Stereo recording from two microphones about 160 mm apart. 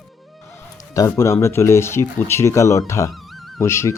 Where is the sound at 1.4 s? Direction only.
15° left (ahead or behind).